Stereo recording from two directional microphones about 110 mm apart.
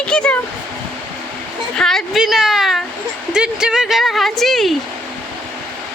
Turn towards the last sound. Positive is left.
turn(degrees=0)  # may be behind; listen again after turning